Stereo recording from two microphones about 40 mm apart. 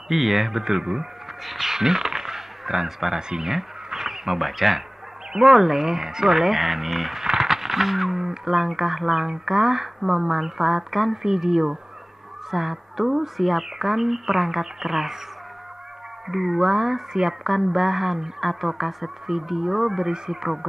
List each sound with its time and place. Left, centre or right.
0.1 s speech: centre
1.4 s speech: centre
16.3 s speech: centre